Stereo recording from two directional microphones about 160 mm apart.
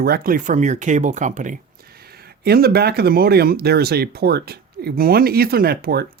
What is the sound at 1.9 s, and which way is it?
Speech, 75° right (ahead or behind).